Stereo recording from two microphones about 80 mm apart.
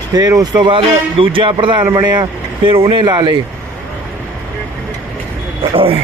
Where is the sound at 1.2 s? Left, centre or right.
Right.